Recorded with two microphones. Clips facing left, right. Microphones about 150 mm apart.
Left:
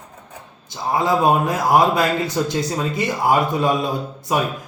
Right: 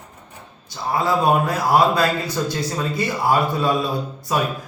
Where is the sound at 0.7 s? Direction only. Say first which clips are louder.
Left 2 dB; 20° left (ahead or behind).